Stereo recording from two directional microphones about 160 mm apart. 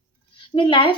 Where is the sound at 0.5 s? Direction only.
30° left (ahead or behind).